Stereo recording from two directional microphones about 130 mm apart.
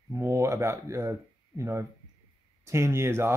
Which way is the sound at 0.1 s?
25° right (ahead or behind).